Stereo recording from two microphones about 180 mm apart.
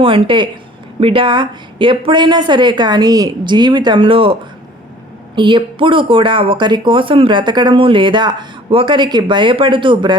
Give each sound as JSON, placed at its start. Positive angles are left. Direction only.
{"t": 0.0, "sound": "speech", "side_deg": -30}